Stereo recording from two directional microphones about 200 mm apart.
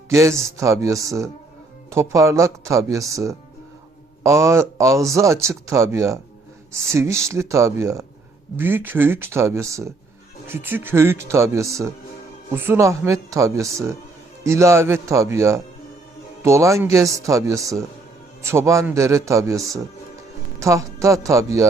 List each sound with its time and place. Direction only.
0.1 s speech: 15° right (ahead or behind)